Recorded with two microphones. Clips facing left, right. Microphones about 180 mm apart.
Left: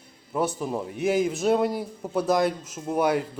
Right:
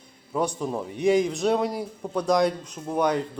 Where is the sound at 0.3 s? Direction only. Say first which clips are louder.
Even; 5° left (ahead or behind).